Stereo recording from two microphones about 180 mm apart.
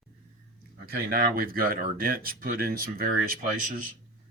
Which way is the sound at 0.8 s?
55° right (ahead or behind).